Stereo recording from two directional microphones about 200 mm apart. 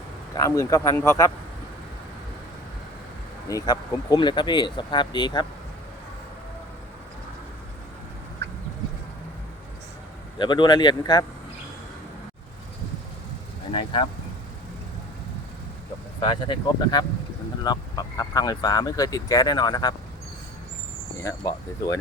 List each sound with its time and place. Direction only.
0.3 s speech: 15° left (ahead or behind)
3.5 s speech: 20° left (ahead or behind)
10.3 s speech: 20° left (ahead or behind)
13.7 s speech: 25° left (ahead or behind)
16.2 s speech: 20° left (ahead or behind)
21.2 s speech: 20° left (ahead or behind)